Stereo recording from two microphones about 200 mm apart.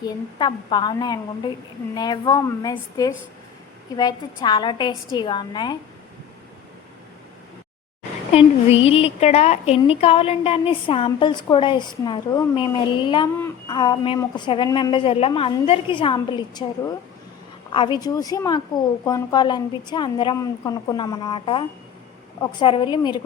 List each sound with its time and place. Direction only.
0.0 s a woman's voice: 20° left (ahead or behind)
8.9 s a woman's voice: 30° left (ahead or behind)
17.7 s a woman's voice: 20° left (ahead or behind)